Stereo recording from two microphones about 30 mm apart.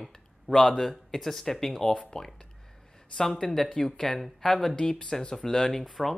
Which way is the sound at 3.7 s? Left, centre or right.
Centre.